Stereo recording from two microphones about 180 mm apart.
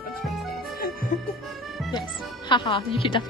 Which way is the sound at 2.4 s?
25° left (ahead or behind).